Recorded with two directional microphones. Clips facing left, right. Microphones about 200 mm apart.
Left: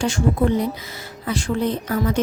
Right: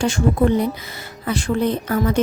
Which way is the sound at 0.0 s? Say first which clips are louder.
Right 2 dB; 55° right (ahead or behind).